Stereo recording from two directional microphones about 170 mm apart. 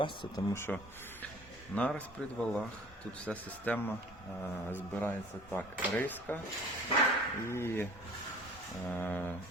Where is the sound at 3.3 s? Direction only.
10° left (ahead or behind).